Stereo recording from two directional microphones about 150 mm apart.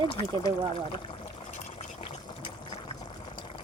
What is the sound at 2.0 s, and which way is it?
Liquid, 35° left (ahead or behind).